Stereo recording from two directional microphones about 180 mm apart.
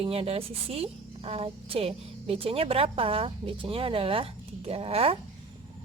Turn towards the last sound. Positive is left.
turn(degrees=-35)  # may be behind; listen again after turning